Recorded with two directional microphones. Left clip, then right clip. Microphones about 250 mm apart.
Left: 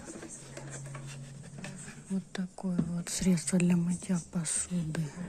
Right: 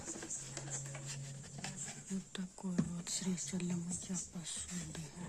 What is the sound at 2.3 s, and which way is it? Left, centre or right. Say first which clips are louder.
Speech: left 5 dB; centre.